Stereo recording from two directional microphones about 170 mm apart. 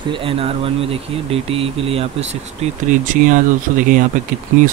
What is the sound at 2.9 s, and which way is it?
Speech, 50° right (ahead or behind).